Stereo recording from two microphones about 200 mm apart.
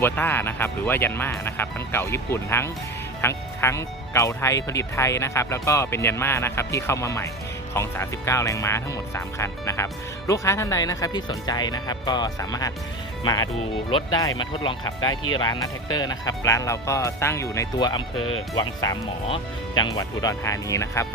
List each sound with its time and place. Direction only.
0.0 s speech: 10° left (ahead or behind)
18.2 s speech: 90° left
18.6 s speech: 20° left (ahead or behind)